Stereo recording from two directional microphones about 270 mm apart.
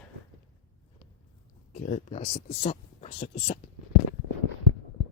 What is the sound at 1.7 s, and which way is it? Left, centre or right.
Speech, left.